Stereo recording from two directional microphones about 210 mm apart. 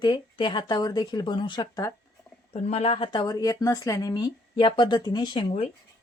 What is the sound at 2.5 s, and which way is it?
Speech, 30° left (ahead or behind).